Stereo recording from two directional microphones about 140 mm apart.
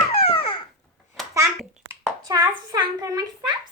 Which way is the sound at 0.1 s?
40° left (ahead or behind).